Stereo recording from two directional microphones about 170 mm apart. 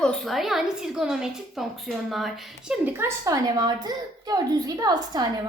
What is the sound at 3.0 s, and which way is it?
A woman's voice, 20° right (ahead or behind).